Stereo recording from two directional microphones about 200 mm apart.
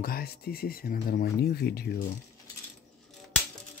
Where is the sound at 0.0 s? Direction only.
50° left (ahead or behind).